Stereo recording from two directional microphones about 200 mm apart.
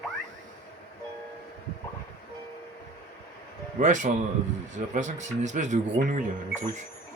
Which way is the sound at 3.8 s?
40° right (ahead or behind).